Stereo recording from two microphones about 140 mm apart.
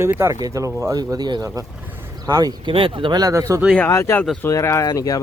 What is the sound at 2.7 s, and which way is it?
Speech, 40° right (ahead or behind).